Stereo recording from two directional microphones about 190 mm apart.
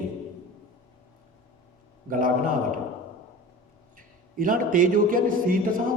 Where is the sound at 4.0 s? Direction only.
45° right (ahead or behind).